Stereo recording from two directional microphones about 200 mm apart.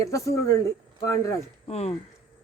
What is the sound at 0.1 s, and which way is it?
Speech, 15° left (ahead or behind).